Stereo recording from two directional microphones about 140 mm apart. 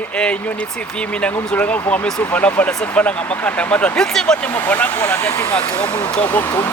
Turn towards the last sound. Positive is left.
turn(degrees=15)  # may be behind; listen again after turning